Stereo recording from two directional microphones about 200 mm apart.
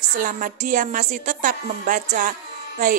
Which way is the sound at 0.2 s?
40° right (ahead or behind).